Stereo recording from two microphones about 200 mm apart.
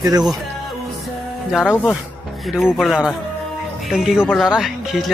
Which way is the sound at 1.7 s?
Centre (ahead or behind).